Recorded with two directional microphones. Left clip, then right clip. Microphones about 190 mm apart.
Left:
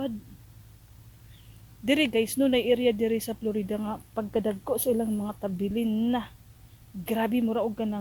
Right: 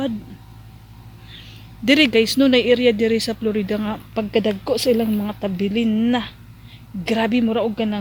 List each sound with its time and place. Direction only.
1.8 s speech: centre (ahead or behind)